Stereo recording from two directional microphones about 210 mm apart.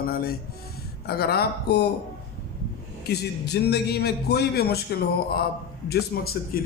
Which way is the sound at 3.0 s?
50° left (ahead or behind).